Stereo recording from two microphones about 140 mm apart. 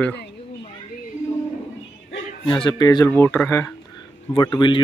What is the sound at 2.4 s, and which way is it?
Speech, 35° left (ahead or behind).